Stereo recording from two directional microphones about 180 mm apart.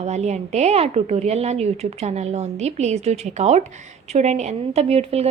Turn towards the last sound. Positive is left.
turn(degrees=-35)  # may be behind; listen again after turning